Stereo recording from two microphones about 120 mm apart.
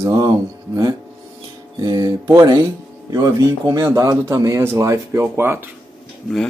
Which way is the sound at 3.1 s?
30° right (ahead or behind).